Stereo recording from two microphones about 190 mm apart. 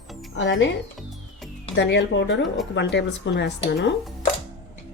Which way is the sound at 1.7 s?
65° left (ahead or behind).